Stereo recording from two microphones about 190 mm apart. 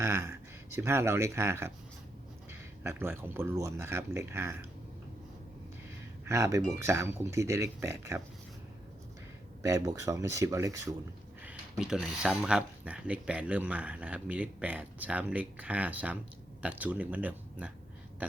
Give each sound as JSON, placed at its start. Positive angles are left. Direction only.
{"t": 0.0, "sound": "speech", "side_deg": -15}
{"t": 6.2, "sound": "speech", "side_deg": -15}
{"t": 9.6, "sound": "speech", "side_deg": -15}
{"t": 11.8, "sound": "speech", "side_deg": -5}
{"t": 18.2, "sound": "a sound", "side_deg": -10}